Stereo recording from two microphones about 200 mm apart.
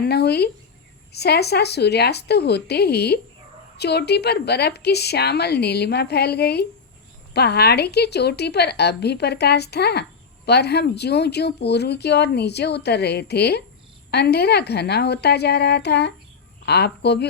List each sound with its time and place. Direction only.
0.0 s a woman's voice: 55° left (ahead or behind)